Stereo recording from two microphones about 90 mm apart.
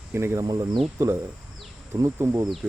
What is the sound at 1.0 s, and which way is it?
Speech, 35° right (ahead or behind).